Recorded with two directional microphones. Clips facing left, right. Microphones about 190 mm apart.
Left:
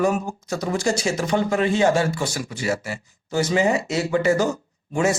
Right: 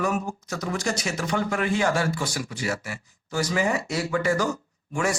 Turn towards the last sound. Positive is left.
turn(degrees=25)  # may be behind; listen again after turning